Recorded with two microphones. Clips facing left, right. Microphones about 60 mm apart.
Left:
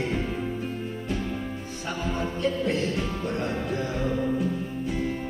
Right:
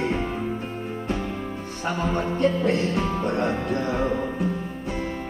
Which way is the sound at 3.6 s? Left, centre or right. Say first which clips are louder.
Right 4 dB; right.